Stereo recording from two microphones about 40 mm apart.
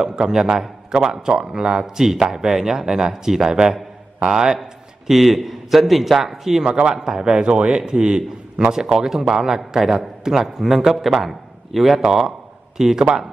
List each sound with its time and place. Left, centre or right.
0.0 s a man's voice: centre
4.6 s a man's voice: centre; by 8.2 s right
8.7 s a man's voice: centre